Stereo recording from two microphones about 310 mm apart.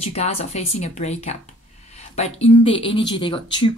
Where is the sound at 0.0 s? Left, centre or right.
Left.